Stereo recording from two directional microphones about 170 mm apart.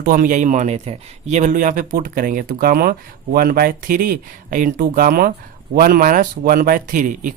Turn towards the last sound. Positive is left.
turn(degrees=-50)  # may be behind; listen again after turning